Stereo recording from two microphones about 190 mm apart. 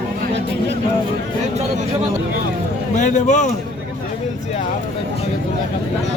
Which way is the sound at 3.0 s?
40° left (ahead or behind).